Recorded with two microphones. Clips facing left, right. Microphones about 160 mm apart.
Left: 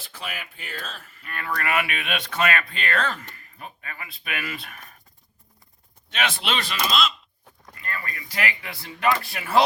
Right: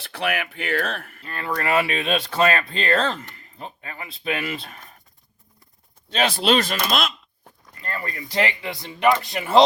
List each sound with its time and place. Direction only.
0.0 s speech: 65° right (ahead or behind)
1.2 s speech: 30° right (ahead or behind)
6.1 s speech: 35° right (ahead or behind); by 7.1 s 55° right (ahead or behind)
7.8 s speech: 30° right (ahead or behind)